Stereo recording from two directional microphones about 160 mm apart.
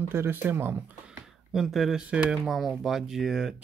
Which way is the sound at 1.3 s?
Centre (ahead or behind).